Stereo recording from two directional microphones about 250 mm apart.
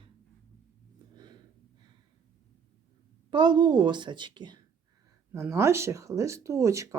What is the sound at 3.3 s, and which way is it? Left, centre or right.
Speech, centre.